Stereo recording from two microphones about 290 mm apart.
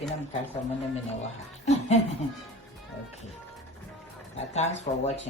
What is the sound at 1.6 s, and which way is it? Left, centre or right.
Chuckle, left.